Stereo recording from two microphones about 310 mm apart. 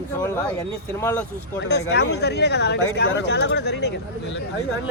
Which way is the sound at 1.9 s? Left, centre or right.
Left.